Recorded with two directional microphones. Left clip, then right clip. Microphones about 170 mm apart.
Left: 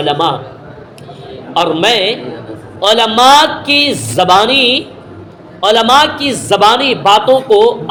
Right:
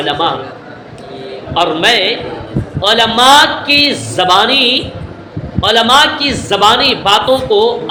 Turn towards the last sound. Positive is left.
turn(degrees=45)  # may be behind; listen again after turning